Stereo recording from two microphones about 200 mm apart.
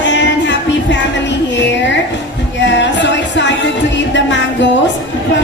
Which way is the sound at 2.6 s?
65° left (ahead or behind).